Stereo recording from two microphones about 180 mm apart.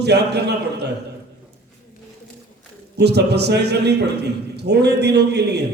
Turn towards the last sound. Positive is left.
turn(degrees=-70)  # may be behind; listen again after turning